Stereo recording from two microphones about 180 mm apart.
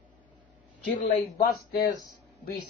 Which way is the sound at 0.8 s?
60° left (ahead or behind).